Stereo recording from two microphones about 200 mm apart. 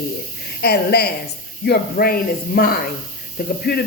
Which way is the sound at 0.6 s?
55° left (ahead or behind).